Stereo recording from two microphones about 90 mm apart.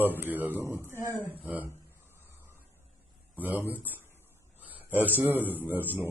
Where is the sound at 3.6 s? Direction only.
20° right (ahead or behind).